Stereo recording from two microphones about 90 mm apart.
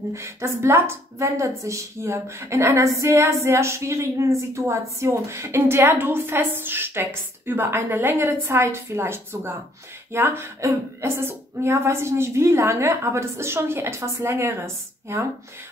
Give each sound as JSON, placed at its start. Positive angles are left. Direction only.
{"t": 0.1, "sound": "a woman's voice", "side_deg": -30}